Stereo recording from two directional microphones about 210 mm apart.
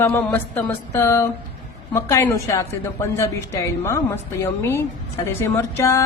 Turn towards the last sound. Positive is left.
turn(degrees=15)  # may be behind; listen again after turning